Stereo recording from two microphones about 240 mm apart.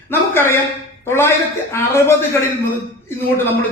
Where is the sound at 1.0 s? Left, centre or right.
Centre.